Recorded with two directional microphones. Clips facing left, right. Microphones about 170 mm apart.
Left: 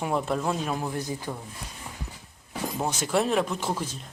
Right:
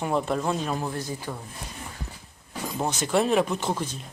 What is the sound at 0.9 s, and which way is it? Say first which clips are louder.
Speech: left 1 dB; 15° left (ahead or behind).